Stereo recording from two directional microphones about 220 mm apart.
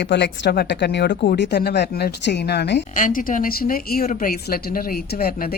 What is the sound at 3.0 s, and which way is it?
Speech, 40° left (ahead or behind).